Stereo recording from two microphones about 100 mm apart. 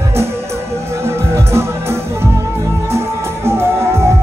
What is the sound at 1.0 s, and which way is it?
Music, 25° right (ahead or behind).